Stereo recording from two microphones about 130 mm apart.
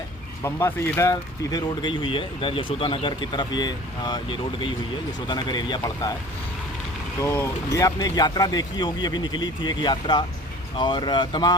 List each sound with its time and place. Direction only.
0.4 s speech: 20° left (ahead or behind)
1.9 s speech: 40° left (ahead or behind)
7.2 s speech: 20° left (ahead or behind)